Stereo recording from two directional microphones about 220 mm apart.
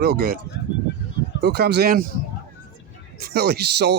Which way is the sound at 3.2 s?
45° right (ahead or behind).